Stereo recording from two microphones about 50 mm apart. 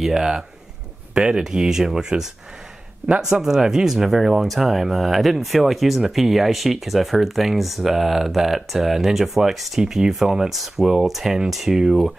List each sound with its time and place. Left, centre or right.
0.0 s speech: centre